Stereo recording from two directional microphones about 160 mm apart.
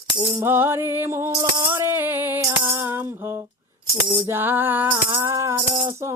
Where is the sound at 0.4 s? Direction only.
15° right (ahead or behind).